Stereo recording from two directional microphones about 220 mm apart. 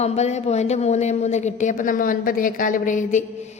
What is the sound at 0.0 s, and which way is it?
A man's voice, 30° left (ahead or behind).